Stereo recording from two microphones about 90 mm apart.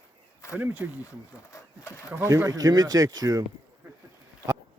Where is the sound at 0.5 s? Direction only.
20° right (ahead or behind).